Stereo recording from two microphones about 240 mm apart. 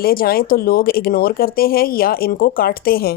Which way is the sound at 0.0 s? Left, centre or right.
Left.